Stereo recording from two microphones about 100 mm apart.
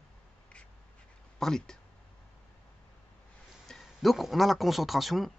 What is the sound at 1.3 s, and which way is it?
Speech, 5° left (ahead or behind).